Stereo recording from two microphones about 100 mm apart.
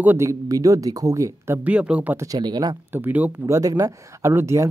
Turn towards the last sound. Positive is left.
turn(degrees=-30)  # may be behind; listen again after turning